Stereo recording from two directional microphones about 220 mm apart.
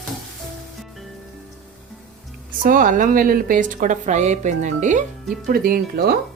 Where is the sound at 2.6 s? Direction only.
35° right (ahead or behind).